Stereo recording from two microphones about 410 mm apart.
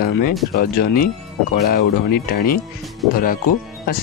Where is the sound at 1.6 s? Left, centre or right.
Left.